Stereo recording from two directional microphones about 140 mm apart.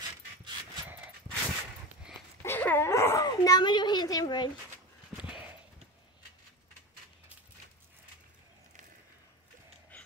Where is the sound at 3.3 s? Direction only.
30° left (ahead or behind).